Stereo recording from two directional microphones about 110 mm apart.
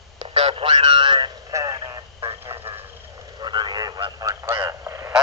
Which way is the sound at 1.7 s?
40° right (ahead or behind).